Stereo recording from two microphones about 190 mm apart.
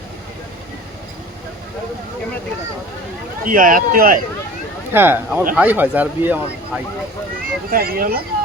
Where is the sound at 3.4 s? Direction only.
45° right (ahead or behind).